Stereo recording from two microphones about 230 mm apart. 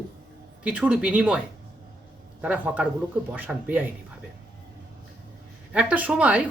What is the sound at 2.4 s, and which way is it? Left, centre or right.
Speech, centre.